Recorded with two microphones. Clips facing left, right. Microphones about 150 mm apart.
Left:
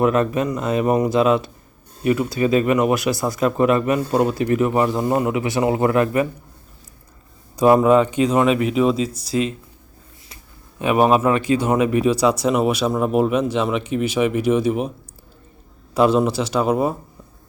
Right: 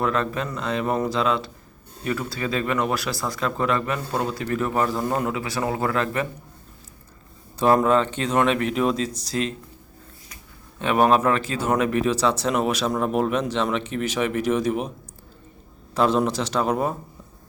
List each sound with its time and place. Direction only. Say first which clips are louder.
0.0 s speech: left 7 dB; 20° left (ahead or behind)
7.5 s speech: left 5 dB; 10° left (ahead or behind)
10.8 s a man's voice: left 3 dB; 10° left (ahead or behind)
16.0 s a man's voice: left 4 dB; 5° left (ahead or behind)